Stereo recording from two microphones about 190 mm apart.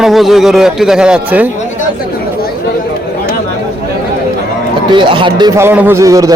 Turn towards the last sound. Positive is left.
turn(degrees=-15)  # may be behind; listen again after turning